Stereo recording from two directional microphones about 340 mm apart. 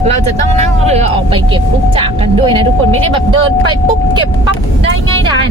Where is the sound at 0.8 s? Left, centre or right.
Centre.